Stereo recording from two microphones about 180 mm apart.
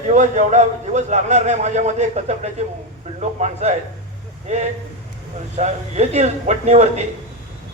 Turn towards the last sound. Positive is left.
turn(degrees=-40)  # may be behind; listen again after turning